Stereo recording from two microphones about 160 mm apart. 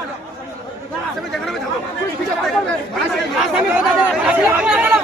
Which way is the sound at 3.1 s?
5° right (ahead or behind).